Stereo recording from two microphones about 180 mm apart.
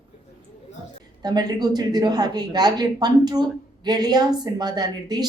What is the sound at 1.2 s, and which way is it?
A woman's voice, 20° right (ahead or behind).